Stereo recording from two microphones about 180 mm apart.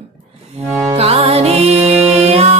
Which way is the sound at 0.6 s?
15° right (ahead or behind).